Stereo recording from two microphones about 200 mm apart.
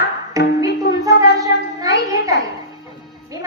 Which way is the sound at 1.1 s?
55° left (ahead or behind).